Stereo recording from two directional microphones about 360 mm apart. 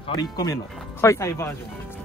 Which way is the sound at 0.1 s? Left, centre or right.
Centre.